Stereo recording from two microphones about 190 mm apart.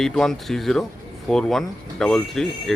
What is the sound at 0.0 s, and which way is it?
Speech, centre (ahead or behind).